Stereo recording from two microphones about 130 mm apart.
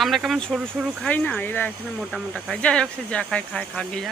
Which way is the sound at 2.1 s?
5° left (ahead or behind).